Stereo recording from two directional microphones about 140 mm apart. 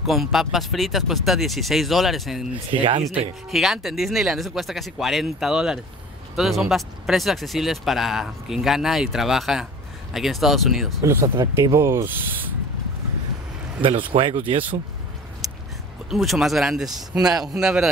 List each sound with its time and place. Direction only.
0.0 s speech: centre (ahead or behind)
2.7 s speech: 35° right (ahead or behind)
3.5 s speech: centre (ahead or behind)
11.0 s speech: 20° right (ahead or behind)
13.8 s speech: 40° right (ahead or behind)
15.4 s a sound: centre (ahead or behind)
16.1 s speech: centre (ahead or behind)